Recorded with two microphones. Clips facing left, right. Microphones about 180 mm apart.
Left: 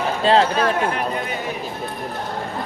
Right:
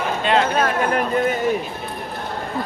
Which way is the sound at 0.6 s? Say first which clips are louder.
Right 1 dB; 45° right (ahead or behind).